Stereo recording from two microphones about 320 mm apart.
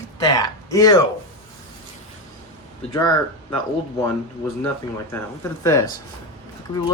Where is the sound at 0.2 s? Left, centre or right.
Centre.